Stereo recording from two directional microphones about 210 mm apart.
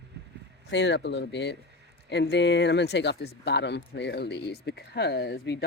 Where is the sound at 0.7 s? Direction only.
55° left (ahead or behind).